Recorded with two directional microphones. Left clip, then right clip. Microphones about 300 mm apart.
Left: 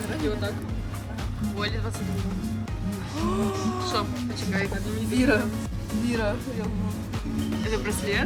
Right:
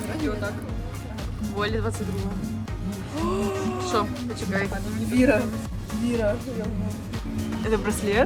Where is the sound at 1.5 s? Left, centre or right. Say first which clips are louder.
Right 4 dB; centre.